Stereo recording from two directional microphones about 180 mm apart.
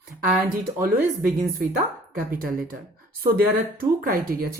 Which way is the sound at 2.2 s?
55° right (ahead or behind).